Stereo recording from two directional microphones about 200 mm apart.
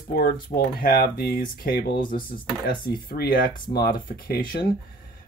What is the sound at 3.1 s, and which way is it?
Speech, 50° left (ahead or behind).